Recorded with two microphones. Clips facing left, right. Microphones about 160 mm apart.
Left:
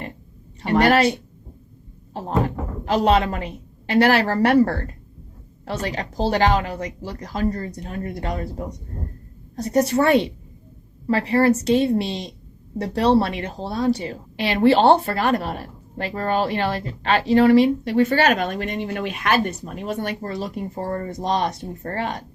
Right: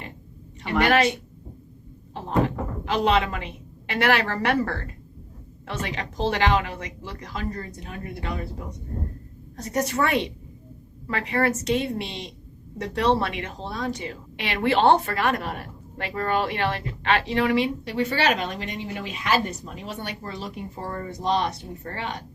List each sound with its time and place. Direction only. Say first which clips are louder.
0.6 s a woman's voice: left 4 dB; 40° left (ahead or behind)